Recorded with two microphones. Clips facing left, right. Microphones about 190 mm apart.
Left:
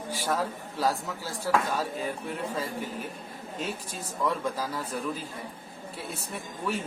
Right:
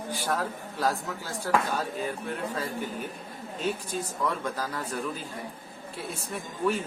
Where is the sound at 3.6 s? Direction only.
Centre (ahead or behind).